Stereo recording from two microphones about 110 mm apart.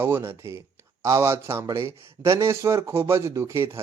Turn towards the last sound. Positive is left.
turn(degrees=-25)  # may be behind; listen again after turning